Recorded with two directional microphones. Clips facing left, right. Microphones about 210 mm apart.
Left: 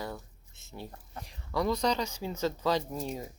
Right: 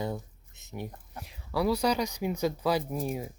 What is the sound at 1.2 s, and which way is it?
Speech, 5° right (ahead or behind).